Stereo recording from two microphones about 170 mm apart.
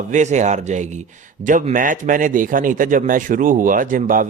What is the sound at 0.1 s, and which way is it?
A man's voice, 45° right (ahead or behind).